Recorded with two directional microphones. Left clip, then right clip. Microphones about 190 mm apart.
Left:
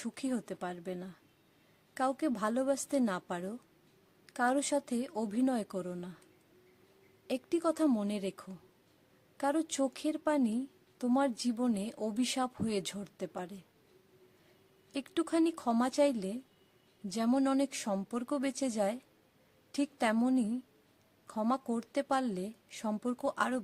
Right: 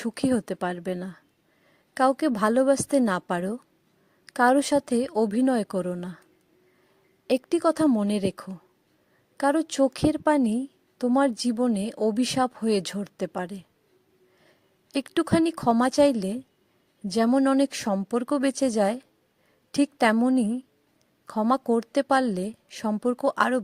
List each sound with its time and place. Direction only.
0.0 s a woman's voice: 40° right (ahead or behind)
7.3 s a woman's voice: 40° right (ahead or behind)
14.9 s a woman's voice: 40° right (ahead or behind)